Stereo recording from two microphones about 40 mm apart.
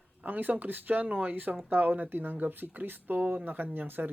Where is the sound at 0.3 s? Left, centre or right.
Right.